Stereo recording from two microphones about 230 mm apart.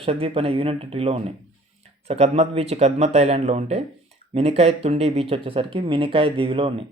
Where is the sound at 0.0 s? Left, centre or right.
Right.